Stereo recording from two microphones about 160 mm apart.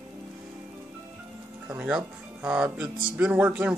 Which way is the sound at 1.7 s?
10° right (ahead or behind).